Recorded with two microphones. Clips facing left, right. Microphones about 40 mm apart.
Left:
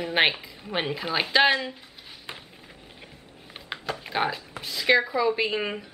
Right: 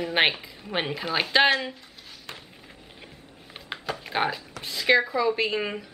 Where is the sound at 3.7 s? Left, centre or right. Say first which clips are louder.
Even; centre.